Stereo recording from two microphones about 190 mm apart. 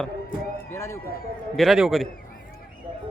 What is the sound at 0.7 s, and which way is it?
Run, 15° left (ahead or behind).